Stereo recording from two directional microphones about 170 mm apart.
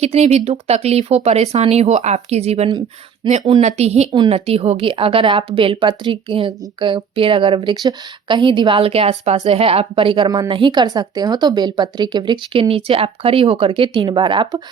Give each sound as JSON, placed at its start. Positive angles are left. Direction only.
{"t": 0.0, "sound": "a woman's voice", "side_deg": -40}